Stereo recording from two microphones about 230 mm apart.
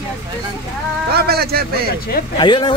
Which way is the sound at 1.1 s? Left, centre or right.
Right.